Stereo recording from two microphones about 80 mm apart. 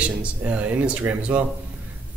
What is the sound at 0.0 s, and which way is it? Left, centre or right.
Speech, centre.